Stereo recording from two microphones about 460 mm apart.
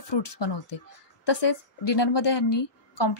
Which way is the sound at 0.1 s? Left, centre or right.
Left.